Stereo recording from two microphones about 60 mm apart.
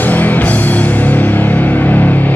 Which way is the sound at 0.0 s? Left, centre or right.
Left.